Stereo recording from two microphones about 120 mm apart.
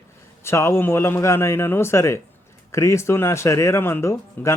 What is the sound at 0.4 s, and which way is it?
Speech, 20° left (ahead or behind).